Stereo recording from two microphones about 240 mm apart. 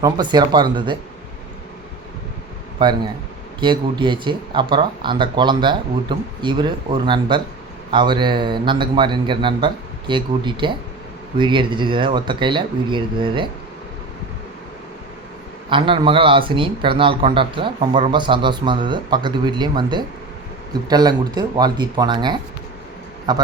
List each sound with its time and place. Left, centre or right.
0.0 s a man's voice: centre
2.7 s a man's voice: centre
15.7 s a man's voice: right